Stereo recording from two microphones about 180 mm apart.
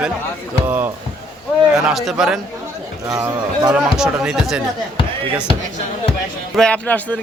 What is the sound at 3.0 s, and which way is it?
Speech, 15° right (ahead or behind).